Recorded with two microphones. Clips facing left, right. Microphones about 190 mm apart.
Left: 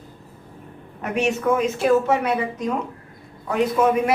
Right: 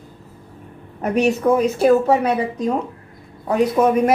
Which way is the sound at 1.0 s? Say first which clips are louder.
Right 5 dB; 35° right (ahead or behind).